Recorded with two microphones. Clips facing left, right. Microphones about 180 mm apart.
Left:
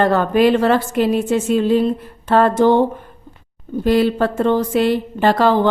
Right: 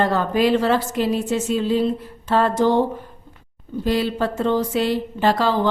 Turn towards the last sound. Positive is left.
turn(degrees=55)  # may be behind; listen again after turning